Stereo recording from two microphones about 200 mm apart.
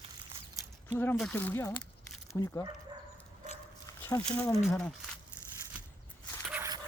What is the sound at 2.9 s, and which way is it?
Dog, 20° right (ahead or behind).